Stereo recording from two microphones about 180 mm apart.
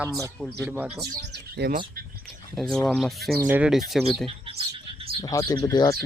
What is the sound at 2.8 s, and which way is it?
Speech, centre (ahead or behind).